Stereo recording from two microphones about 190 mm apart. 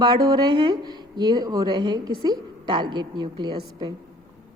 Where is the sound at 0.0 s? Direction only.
20° right (ahead or behind).